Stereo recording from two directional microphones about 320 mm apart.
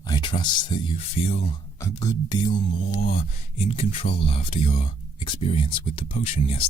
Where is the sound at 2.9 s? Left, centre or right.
Left.